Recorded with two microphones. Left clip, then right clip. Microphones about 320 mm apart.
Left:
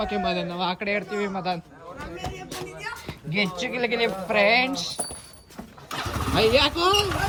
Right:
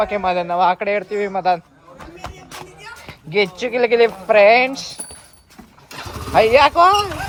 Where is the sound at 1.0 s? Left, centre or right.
Centre.